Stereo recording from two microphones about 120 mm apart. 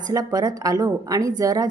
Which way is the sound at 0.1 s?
30° right (ahead or behind).